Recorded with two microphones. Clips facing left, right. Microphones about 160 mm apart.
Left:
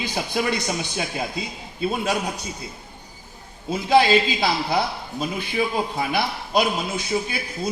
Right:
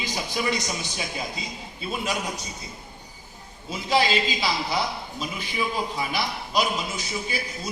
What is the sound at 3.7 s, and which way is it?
A man's voice, 55° left (ahead or behind).